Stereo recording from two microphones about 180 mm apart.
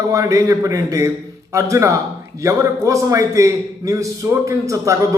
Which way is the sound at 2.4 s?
15° right (ahead or behind).